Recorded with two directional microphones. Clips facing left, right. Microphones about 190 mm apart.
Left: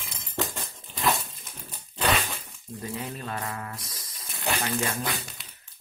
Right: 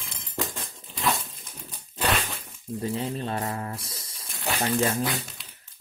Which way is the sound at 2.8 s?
30° right (ahead or behind).